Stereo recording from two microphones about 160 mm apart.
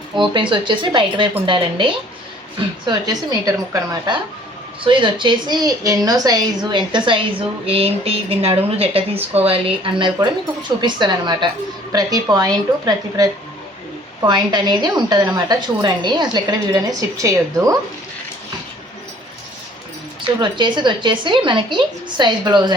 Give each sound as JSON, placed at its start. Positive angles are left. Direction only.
{"t": 0.2, "sound": "a woman's voice", "side_deg": -30}
{"t": 20.4, "sound": "a woman's voice", "side_deg": -30}